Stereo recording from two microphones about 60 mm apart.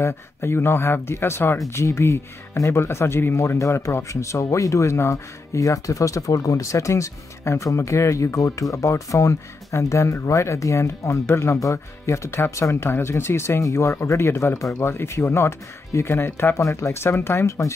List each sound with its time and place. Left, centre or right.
0.0 s speech: left
3.3 s speech: left
5.1 s speech: left
12.9 s speech: left
15.0 s speech: left
16.5 s speech: left